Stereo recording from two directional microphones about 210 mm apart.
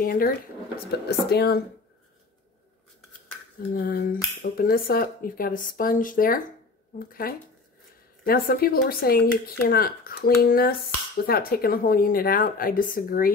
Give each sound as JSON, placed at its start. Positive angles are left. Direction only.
{"t": 0.0, "sound": "speech", "side_deg": 45}
{"t": 3.7, "sound": "speech", "side_deg": 45}